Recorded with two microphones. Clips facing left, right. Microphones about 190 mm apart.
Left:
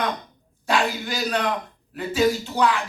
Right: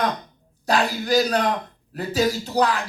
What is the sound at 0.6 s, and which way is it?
A man's voice, 40° right (ahead or behind).